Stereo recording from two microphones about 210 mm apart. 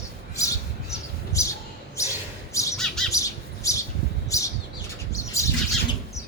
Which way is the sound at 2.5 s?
15° left (ahead or behind).